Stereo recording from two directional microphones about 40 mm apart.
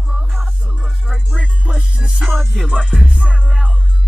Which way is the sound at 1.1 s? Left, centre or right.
Centre.